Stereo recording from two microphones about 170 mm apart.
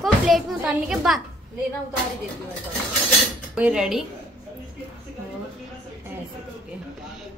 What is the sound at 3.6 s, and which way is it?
Speech, 5° right (ahead or behind).